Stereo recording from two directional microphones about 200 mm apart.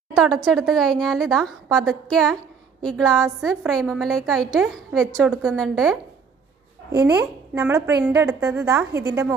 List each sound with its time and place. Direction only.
0.1 s a woman's voice: centre (ahead or behind)
6.9 s a woman's voice: 15° right (ahead or behind)